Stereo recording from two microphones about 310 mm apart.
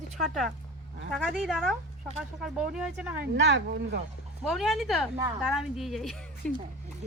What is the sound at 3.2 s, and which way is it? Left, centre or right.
Speech, right.